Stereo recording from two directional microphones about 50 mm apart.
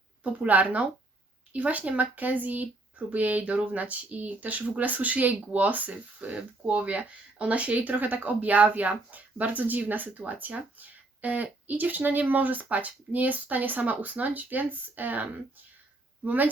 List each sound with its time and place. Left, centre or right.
0.2 s speech: right